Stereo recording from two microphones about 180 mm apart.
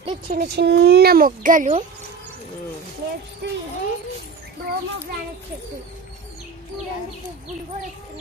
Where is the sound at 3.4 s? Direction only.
70° right (ahead or behind).